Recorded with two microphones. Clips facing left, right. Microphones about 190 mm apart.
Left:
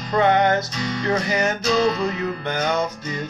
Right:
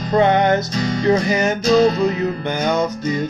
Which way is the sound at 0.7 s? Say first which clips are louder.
Right 6 dB; 40° right (ahead or behind).